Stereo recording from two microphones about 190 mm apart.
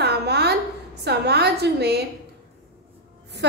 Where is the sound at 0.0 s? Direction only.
60° right (ahead or behind).